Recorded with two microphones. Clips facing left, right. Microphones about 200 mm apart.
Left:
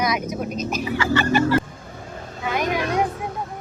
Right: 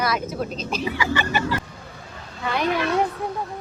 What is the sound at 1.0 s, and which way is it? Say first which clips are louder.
Speech: left 7 dB; 15° right (ahead or behind).